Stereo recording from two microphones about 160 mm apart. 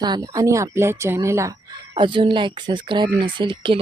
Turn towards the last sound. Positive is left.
turn(degrees=-30)  # may be behind; listen again after turning